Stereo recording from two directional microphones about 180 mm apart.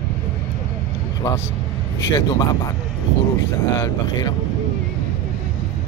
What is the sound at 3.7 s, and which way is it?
Speech, 20° left (ahead or behind).